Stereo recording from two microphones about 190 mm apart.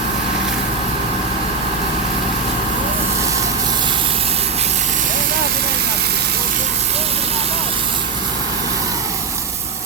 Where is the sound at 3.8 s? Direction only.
30° right (ahead or behind).